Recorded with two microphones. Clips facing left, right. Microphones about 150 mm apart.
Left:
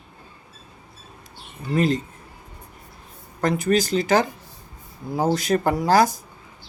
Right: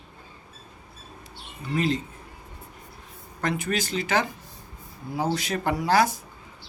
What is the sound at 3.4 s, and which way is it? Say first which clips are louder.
Speech: left 7 dB; 40° left (ahead or behind).